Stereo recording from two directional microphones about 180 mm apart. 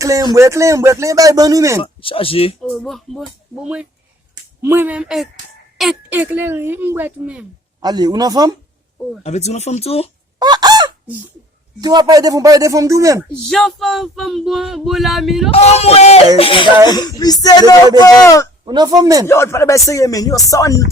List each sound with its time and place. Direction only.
0.0 s a woman's voice: 20° right (ahead or behind)
1.8 s speech: 30° left (ahead or behind)
2.6 s male singing: centre (ahead or behind)
4.6 s a woman's voice: 10° right (ahead or behind)
7.8 s speech: 25° right (ahead or behind)
9.2 s speech: 35° left (ahead or behind)
10.4 s fowl: 25° right (ahead or behind)
11.8 s speech: 20° right (ahead or behind)
13.5 s male singing: centre (ahead or behind)
15.4 s speech: 35° left (ahead or behind); by 18.4 s 20° left (ahead or behind)
18.6 s speech: 20° right (ahead or behind)
19.3 s a sound: 15° left (ahead or behind)